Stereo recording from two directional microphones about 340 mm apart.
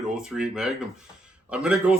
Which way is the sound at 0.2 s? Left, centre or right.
Centre.